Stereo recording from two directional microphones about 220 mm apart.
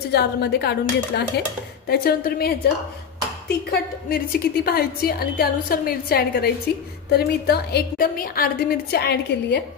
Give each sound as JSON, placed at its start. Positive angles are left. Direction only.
{"t": 0.1, "sound": "a woman's voice", "side_deg": 45}